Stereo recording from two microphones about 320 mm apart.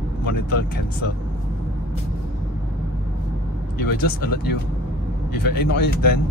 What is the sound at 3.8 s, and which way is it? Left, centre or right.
Speech, left.